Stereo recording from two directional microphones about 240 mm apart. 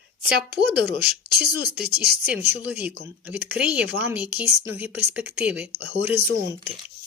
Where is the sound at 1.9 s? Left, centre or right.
Right.